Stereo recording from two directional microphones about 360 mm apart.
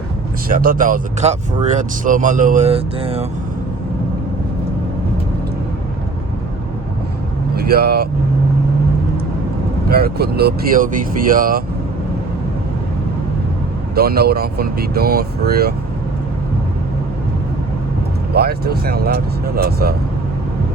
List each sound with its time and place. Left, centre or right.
0.4 s speech: right
7.5 s speech: right
9.9 s speech: right
13.9 s speech: right
18.3 s speech: right